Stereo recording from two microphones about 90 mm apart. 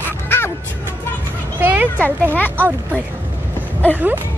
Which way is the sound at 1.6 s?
20° right (ahead or behind).